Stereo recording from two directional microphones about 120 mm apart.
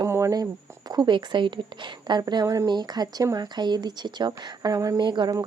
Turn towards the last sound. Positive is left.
turn(degrees=-35)  # may be behind; listen again after turning